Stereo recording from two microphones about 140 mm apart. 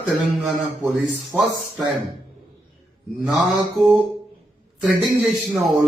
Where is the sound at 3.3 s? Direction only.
Centre (ahead or behind).